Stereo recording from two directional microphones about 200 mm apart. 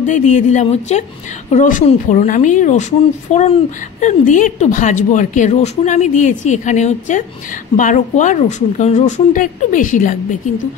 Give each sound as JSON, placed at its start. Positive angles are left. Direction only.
{"t": 0.0, "sound": "a woman's voice", "side_deg": 40}